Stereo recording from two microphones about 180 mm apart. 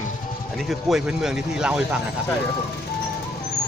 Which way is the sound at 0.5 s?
Centre (ahead or behind).